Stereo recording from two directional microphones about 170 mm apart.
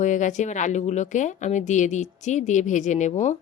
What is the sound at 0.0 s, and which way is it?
Speech, 45° left (ahead or behind).